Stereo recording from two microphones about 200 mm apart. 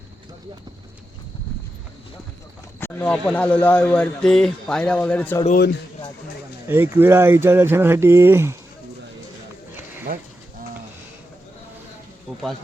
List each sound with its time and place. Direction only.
2.8 s speech: 10° left (ahead or behind)
5.5 s speech: 50° left (ahead or behind)
6.7 s speech: 10° right (ahead or behind)
10.1 s speech: 45° right (ahead or behind)